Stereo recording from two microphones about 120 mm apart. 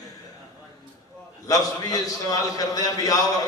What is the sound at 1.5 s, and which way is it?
A man's voice, 30° left (ahead or behind).